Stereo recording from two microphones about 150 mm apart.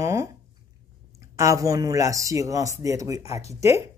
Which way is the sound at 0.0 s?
20° right (ahead or behind).